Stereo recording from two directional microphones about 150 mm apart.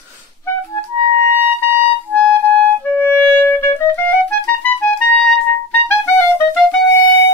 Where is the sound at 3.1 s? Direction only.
15° left (ahead or behind).